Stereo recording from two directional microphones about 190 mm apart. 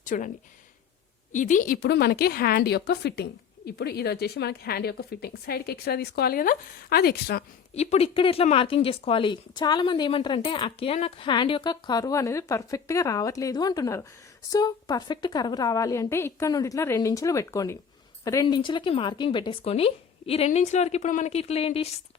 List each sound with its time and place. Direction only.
0.0 s speech: 45° left (ahead or behind)
1.3 s a woman's voice: 40° left (ahead or behind)
7.8 s a woman's voice: 35° left (ahead or behind)